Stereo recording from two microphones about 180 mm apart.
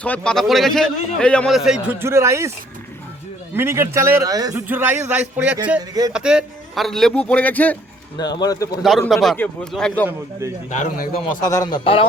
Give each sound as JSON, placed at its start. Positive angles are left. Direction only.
{"t": 0.0, "sound": "a man's voice", "side_deg": 5}
{"t": 3.5, "sound": "a man's voice", "side_deg": -15}
{"t": 8.2, "sound": "speech", "side_deg": 20}
{"t": 8.8, "sound": "a man's voice", "side_deg": 0}
{"t": 10.7, "sound": "a man's voice", "side_deg": 45}
{"t": 11.4, "sound": "speech", "side_deg": 20}